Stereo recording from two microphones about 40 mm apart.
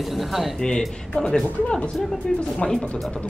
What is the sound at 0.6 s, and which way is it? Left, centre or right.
Speech, centre.